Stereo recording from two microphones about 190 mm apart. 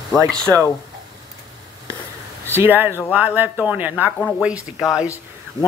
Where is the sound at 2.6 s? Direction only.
10° right (ahead or behind).